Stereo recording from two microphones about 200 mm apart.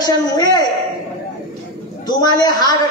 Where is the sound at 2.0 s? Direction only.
20° left (ahead or behind).